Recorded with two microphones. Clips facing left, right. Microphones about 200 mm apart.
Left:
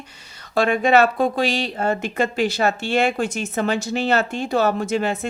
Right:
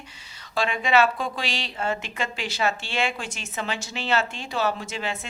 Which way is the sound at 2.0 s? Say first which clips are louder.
Left 11 dB; 55° left (ahead or behind).